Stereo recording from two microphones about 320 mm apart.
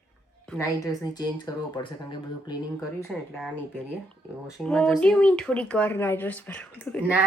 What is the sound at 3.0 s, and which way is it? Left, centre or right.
Speech, centre.